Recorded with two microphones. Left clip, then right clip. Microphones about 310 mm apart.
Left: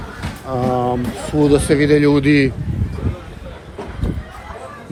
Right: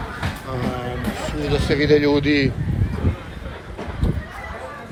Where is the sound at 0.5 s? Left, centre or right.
Centre.